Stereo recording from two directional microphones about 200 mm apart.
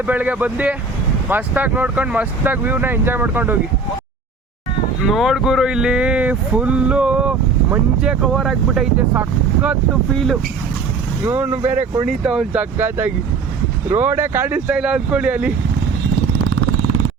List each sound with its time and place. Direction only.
0.0 s speech: 10° right (ahead or behind)
5.0 s speech: centre (ahead or behind)
11.2 s speech: 10° right (ahead or behind)
11.6 s speech: 35° right (ahead or behind)
12.0 s speech: 5° right (ahead or behind)
16.5 s vehicle: 70° right (ahead or behind)